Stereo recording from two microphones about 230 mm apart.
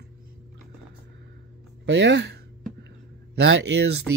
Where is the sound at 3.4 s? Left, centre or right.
Right.